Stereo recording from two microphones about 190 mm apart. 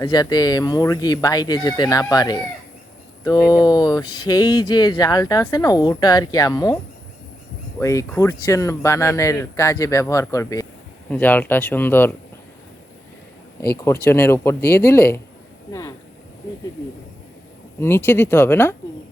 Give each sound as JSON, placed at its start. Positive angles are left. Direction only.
{"t": 0.0, "sound": "speech", "side_deg": 20}
{"t": 3.5, "sound": "speech", "side_deg": 25}
{"t": 7.8, "sound": "speech", "side_deg": 15}
{"t": 13.8, "sound": "speech", "side_deg": 10}
{"t": 15.7, "sound": "a sound", "side_deg": 15}
{"t": 17.7, "sound": "speech", "side_deg": 10}